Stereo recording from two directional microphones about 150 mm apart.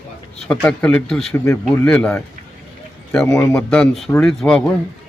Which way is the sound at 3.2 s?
20° left (ahead or behind).